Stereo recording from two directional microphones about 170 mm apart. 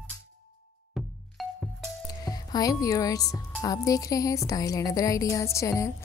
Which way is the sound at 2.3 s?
20° left (ahead or behind).